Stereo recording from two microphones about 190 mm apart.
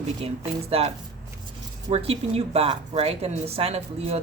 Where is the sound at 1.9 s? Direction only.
30° right (ahead or behind).